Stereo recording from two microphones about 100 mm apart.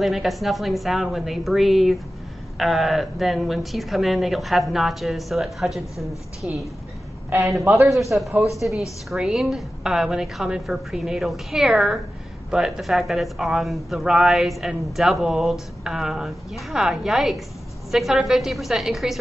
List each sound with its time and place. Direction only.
0.0 s speech: centre (ahead or behind)
7.3 s a man's voice: 30° right (ahead or behind)
7.6 s a man's voice: 15° right (ahead or behind)
7.9 s speech: centre (ahead or behind)